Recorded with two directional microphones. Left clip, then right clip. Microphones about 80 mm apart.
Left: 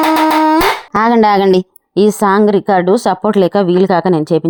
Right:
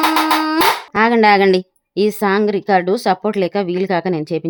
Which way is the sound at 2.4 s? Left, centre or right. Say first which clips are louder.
Left 4 dB; left.